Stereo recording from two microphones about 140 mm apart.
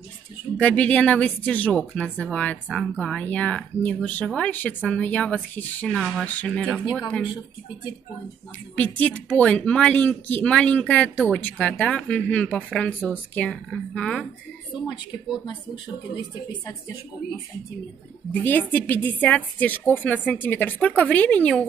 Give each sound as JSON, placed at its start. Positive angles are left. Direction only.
{"t": 0.6, "sound": "speech", "side_deg": 10}
{"t": 6.6, "sound": "speech", "side_deg": -5}
{"t": 8.7, "sound": "speech", "side_deg": 10}
{"t": 18.3, "sound": "speech", "side_deg": 10}